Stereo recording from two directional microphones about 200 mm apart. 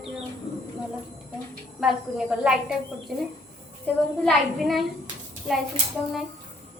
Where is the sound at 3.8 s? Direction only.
Centre (ahead or behind).